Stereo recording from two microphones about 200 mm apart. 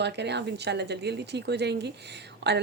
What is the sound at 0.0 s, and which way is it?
A woman's voice, 60° right (ahead or behind).